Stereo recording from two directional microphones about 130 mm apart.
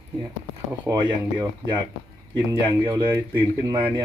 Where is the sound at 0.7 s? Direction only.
25° right (ahead or behind).